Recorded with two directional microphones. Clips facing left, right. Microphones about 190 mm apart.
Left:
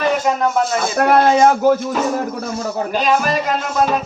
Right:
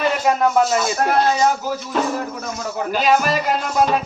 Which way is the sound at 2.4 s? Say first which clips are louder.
Left 4 dB; 30° left (ahead or behind).